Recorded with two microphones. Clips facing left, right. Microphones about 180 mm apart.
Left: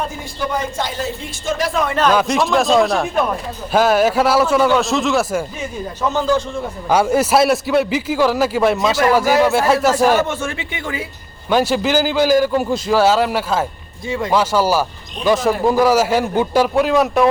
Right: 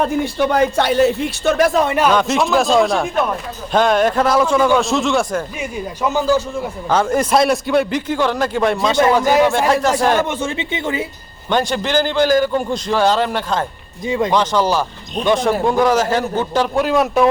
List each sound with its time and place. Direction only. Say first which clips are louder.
0.3 s a man's voice: right 5 dB; 70° right (ahead or behind)
1.9 s a man's voice: even; 10° right (ahead or behind); by 5.5 s 5° left (ahead or behind)
5.5 s speech: right 1 dB; 10° right (ahead or behind)
6.8 s a man's voice: left 2 dB; 10° left (ahead or behind)
10.2 s speech: right 2 dB; 20° right (ahead or behind)
11.4 s a man's voice: left 2 dB; 5° left (ahead or behind)
16.7 s a man's voice: right 2 dB; centre (ahead or behind)